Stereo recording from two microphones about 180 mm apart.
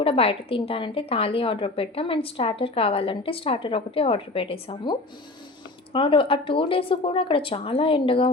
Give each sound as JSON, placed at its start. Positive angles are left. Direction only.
{"t": 0.0, "sound": "a woman's voice", "side_deg": 30}